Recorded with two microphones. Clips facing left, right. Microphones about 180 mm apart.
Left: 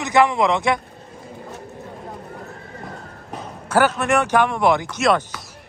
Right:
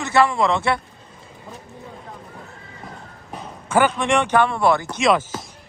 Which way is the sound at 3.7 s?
5° left (ahead or behind).